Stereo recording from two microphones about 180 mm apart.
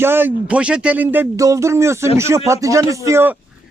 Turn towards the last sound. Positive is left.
turn(degrees=-15)  # may be behind; listen again after turning